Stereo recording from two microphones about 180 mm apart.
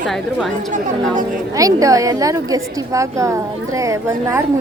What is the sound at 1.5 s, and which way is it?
A woman's voice, 20° right (ahead or behind).